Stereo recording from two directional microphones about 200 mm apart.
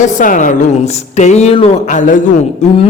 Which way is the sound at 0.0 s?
40° left (ahead or behind).